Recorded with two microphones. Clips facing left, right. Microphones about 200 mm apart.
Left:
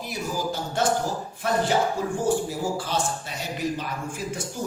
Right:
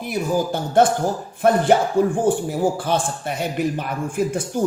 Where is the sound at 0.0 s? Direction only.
55° right (ahead or behind).